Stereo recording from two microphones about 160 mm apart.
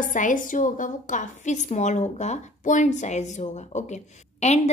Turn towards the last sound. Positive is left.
turn(degrees=45)  # may be behind; listen again after turning